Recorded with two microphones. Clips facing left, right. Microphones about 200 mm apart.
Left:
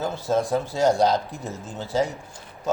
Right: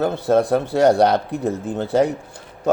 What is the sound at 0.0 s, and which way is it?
Speech, 60° right (ahead or behind).